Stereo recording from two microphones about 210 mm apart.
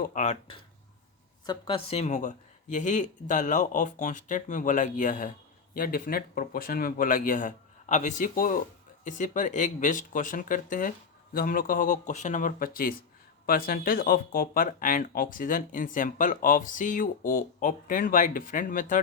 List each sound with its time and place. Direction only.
0.0 s speech: 35° left (ahead or behind)